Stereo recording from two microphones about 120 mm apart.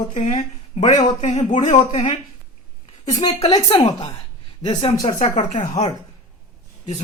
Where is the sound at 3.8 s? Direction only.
40° left (ahead or behind).